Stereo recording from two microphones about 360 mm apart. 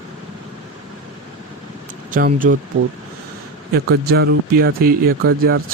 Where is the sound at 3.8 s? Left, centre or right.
Right.